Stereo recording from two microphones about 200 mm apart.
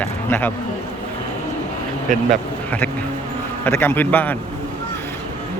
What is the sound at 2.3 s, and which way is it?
Speech, 10° left (ahead or behind).